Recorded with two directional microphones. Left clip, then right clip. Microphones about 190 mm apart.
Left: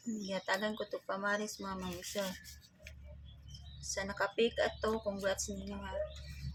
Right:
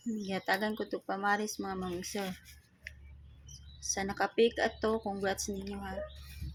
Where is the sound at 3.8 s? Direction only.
30° right (ahead or behind).